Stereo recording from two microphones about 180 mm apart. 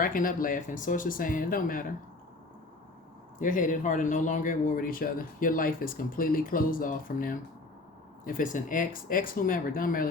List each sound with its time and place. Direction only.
0.0 s speech: 50° left (ahead or behind)
3.3 s speech: 45° left (ahead or behind)